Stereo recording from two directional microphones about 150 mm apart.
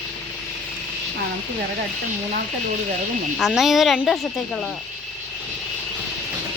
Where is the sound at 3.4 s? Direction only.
Centre (ahead or behind).